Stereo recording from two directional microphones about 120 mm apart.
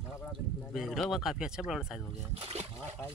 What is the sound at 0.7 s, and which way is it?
Speech, centre (ahead or behind).